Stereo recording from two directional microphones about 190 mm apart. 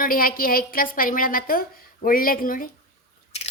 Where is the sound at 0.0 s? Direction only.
50° left (ahead or behind).